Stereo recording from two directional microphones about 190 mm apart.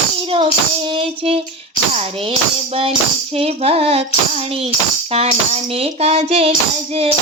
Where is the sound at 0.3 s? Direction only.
30° right (ahead or behind).